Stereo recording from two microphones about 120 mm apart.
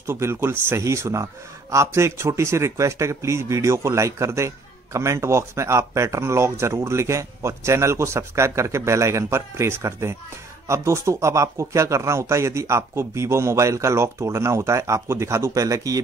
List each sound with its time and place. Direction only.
0.0 s a man's voice: 20° right (ahead or behind)